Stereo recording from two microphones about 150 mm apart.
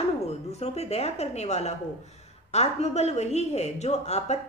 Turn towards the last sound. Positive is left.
turn(degrees=45)  # may be behind; listen again after turning